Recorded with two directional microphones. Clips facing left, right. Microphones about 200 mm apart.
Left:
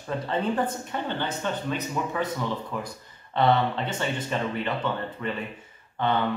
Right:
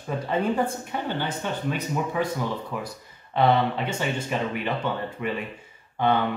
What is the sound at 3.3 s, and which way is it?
Speech, 10° right (ahead or behind).